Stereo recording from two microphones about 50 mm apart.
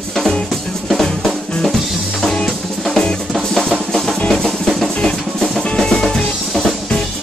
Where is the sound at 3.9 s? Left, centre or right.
Centre.